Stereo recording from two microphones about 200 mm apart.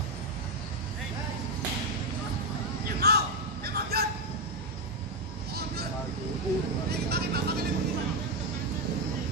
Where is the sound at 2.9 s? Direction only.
50° right (ahead or behind).